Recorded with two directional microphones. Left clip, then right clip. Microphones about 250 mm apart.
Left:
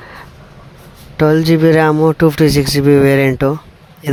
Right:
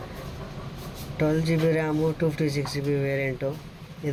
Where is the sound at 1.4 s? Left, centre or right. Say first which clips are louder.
Left 16 dB; left.